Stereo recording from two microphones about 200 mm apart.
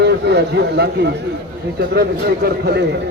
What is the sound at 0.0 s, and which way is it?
A man's voice, 55° right (ahead or behind).